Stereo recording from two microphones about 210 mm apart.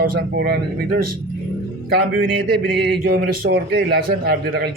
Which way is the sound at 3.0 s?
45° right (ahead or behind).